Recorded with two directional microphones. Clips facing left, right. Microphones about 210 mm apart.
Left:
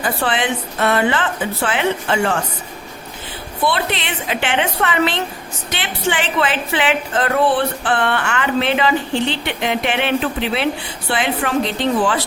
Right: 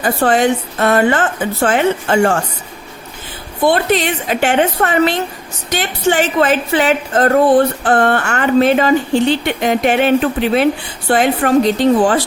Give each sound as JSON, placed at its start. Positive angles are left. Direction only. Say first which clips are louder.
{"t": 0.0, "sound": "a woman's voice", "louder": "right 7 dB", "side_deg": -45}
{"t": 3.6, "sound": "a woman's voice", "louder": "right 7 dB", "side_deg": -45}